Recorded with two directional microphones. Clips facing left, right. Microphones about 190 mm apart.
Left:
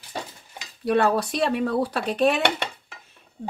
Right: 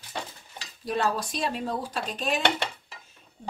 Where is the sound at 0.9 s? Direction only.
60° left (ahead or behind).